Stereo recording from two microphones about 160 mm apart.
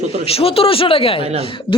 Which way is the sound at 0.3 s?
35° left (ahead or behind).